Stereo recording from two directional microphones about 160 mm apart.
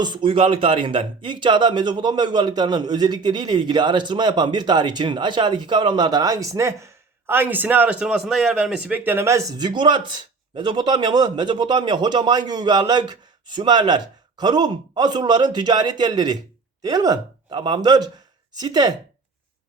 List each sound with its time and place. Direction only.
0.0 s a man's voice: 30° right (ahead or behind)